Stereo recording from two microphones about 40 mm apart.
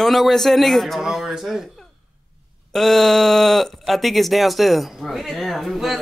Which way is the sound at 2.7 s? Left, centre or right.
Centre.